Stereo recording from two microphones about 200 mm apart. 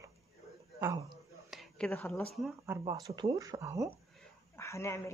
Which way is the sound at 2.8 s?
20° right (ahead or behind).